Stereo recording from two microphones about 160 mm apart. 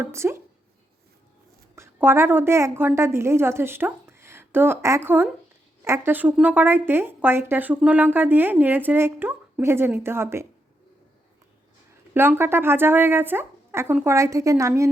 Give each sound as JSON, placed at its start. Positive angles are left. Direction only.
{"t": 0.0, "sound": "a woman's voice", "side_deg": -15}
{"t": 1.7, "sound": "a woman's voice", "side_deg": -15}
{"t": 12.1, "sound": "a woman's voice", "side_deg": -15}